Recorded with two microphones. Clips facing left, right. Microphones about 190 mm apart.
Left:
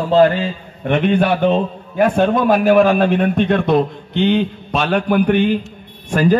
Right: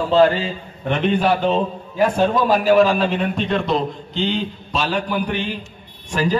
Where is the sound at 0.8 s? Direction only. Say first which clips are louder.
Left 3 dB; 60° left (ahead or behind).